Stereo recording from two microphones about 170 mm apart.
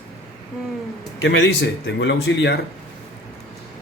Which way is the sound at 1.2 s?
90° left.